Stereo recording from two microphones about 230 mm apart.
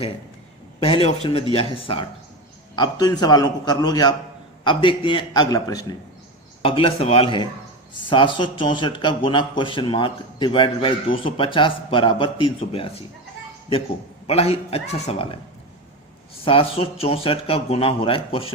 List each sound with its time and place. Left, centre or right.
0.8 s a man's voice: left
14.3 s a man's voice: left
16.4 s a man's voice: left